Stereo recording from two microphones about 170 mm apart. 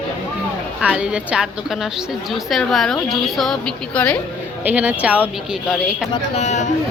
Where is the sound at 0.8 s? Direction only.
5° right (ahead or behind).